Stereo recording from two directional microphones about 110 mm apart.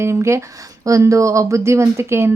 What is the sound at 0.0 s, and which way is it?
Speech, 25° right (ahead or behind).